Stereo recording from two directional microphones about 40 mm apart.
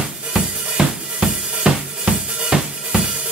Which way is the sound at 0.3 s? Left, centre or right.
Centre.